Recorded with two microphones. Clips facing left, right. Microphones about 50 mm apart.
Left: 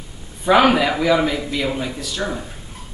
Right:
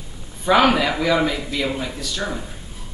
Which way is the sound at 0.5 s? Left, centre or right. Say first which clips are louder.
Left 2 dB; centre.